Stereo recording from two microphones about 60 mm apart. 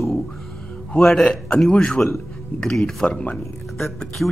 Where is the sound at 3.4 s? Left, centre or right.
Centre.